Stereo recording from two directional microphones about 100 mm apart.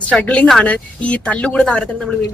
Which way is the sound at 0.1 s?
10° left (ahead or behind).